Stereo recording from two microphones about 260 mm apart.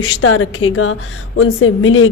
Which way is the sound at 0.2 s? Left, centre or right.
Left.